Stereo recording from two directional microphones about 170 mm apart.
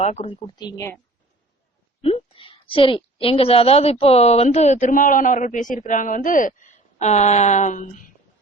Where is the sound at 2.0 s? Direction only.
35° left (ahead or behind).